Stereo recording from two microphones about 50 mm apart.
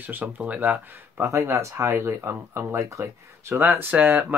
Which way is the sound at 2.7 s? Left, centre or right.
Right.